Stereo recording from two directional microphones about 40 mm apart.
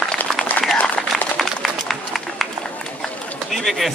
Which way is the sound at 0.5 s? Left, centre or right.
Left.